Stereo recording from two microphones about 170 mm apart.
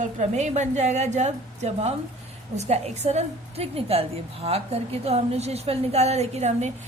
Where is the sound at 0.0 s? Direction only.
40° right (ahead or behind).